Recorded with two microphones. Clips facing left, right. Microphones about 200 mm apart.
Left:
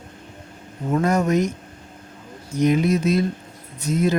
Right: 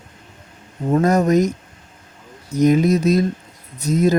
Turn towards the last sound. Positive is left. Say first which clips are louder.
# right 4 dB
turn(degrees=-40)  # may be behind; listen again after turning